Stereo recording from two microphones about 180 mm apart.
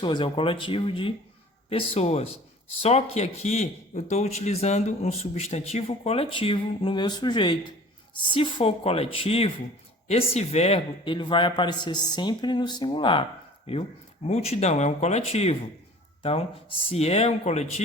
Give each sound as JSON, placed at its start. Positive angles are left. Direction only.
{"t": 0.0, "sound": "a man's voice", "side_deg": 25}